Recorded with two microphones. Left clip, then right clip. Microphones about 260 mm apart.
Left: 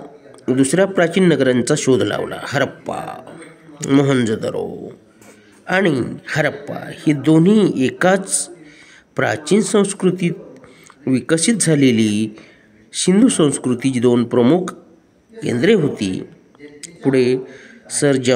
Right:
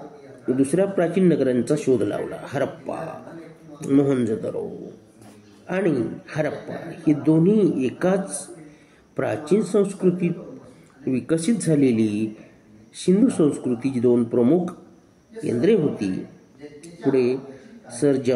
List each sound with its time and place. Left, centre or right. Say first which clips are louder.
0.6 s a man's voice: left 6 dB; left
5.7 s a man's voice: left 6 dB; left